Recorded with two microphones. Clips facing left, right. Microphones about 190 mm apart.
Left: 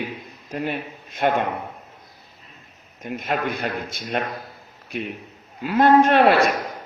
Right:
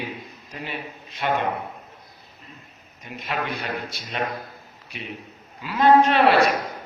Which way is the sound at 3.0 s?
50° left (ahead or behind).